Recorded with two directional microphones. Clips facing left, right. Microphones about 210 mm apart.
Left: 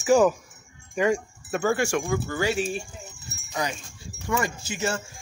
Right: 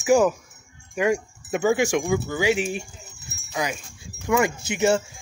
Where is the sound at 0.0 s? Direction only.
10° right (ahead or behind).